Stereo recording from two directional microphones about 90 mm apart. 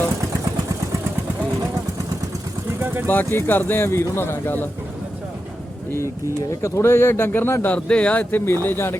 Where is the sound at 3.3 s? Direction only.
20° left (ahead or behind).